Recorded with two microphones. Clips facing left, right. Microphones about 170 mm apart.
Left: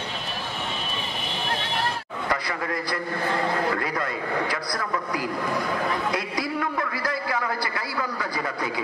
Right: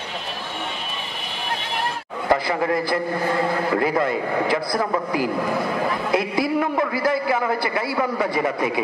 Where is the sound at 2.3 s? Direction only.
25° right (ahead or behind).